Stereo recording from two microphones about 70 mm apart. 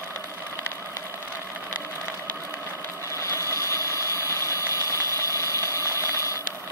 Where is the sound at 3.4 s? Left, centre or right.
Left.